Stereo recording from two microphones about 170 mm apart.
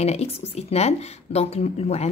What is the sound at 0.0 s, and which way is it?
A woman's voice, 40° left (ahead or behind).